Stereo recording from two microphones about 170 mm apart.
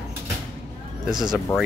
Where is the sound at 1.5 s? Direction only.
15° left (ahead or behind).